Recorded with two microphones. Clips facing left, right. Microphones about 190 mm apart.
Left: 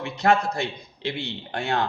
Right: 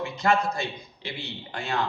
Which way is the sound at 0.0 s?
65° left (ahead or behind).